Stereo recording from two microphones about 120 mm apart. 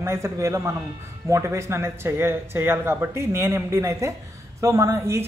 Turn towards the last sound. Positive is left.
turn(degrees=-20)  # may be behind; listen again after turning